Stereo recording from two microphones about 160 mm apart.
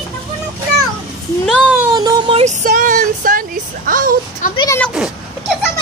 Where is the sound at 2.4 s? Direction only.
55° right (ahead or behind).